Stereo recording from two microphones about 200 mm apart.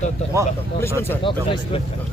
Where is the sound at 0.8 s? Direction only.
10° left (ahead or behind).